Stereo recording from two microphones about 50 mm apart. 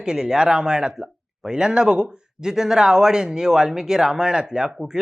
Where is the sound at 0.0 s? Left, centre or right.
Centre.